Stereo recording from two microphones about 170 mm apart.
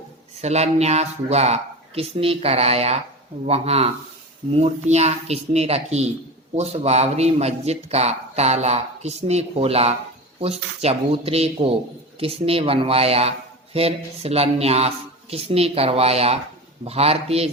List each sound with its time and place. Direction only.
0.4 s speech: 40° right (ahead or behind)